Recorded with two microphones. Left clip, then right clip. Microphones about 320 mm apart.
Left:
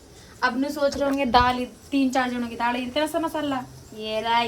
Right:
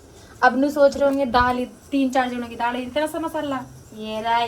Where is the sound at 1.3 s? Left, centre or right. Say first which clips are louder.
Left 4 dB; centre.